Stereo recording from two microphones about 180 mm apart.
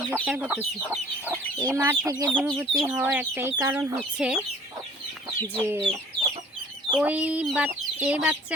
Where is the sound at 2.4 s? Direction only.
Centre (ahead or behind).